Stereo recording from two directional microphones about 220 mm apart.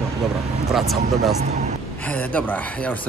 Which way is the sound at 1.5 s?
30° right (ahead or behind).